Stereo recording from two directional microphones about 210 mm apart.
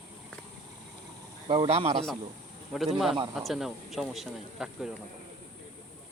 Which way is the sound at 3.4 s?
Centre (ahead or behind).